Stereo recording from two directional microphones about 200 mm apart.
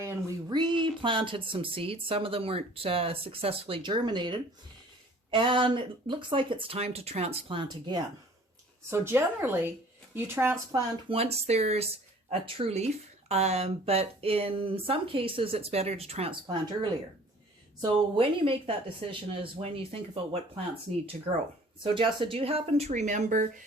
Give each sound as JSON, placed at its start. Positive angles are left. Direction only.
{"t": 0.0, "sound": "a sound", "side_deg": -15}
{"t": 1.0, "sound": "speech", "side_deg": -25}
{"t": 8.9, "sound": "speech", "side_deg": -10}
{"t": 11.1, "sound": "speech", "side_deg": -30}
{"t": 17.8, "sound": "speech", "side_deg": -25}
{"t": 21.8, "sound": "speech", "side_deg": -25}